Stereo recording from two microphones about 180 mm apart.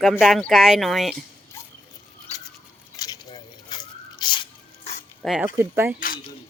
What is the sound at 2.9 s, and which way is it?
Crunch, 20° left (ahead or behind).